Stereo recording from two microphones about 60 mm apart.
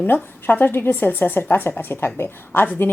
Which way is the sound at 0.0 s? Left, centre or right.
Left.